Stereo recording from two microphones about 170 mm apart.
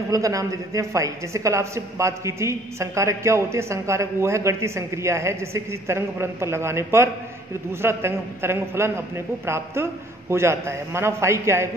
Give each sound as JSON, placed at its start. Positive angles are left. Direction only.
{"t": 0.1, "sound": "a woman's voice", "side_deg": -20}